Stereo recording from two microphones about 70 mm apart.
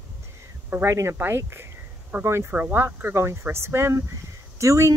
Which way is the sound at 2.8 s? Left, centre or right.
Right.